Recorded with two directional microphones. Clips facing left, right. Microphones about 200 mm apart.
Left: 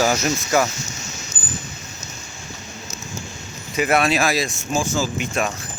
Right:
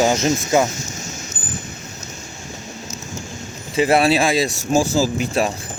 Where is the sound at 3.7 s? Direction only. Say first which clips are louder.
Right 3 dB; 30° right (ahead or behind).